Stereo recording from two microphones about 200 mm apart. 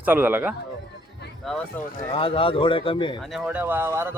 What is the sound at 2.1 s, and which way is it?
Speech, 25° left (ahead or behind).